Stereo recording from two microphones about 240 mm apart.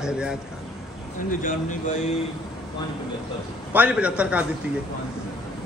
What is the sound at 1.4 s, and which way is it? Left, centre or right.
Speech, left.